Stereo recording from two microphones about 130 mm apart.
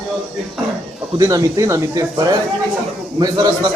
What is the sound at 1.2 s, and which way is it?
Speech, 25° right (ahead or behind).